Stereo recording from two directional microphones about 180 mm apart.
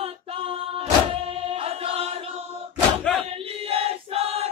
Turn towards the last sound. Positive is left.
turn(degrees=-35)  # may be behind; listen again after turning